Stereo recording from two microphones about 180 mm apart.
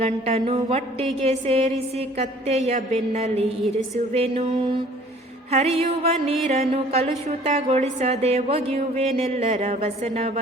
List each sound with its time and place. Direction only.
0.0 s speech: 35° right (ahead or behind)